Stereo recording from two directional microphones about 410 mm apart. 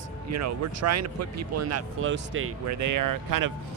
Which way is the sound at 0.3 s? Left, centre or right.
Right.